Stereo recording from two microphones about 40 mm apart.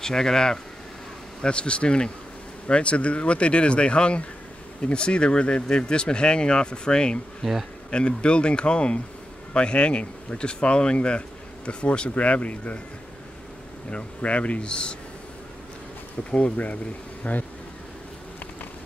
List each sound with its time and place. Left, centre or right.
0.0 s speech: centre
1.4 s speech: left
7.4 s speech: centre
7.9 s speech: left
13.8 s speech: left
16.3 s speech: left
17.2 s a sound: left